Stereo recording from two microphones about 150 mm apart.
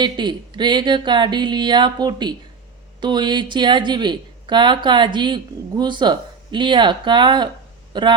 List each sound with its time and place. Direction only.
0.0 s speech: 30° right (ahead or behind)